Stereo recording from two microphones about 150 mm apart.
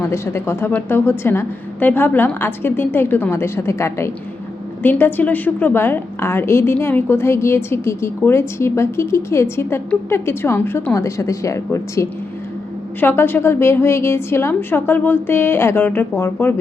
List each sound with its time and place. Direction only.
0.0 s a woman's voice: 15° left (ahead or behind)